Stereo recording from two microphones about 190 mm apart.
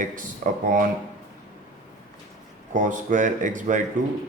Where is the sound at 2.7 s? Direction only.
45° right (ahead or behind).